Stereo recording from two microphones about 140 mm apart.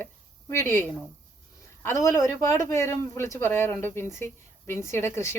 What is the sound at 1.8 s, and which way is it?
A woman's voice, 20° left (ahead or behind).